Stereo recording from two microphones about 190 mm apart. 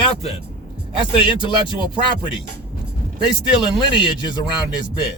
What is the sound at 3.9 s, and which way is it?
Music, 25° left (ahead or behind).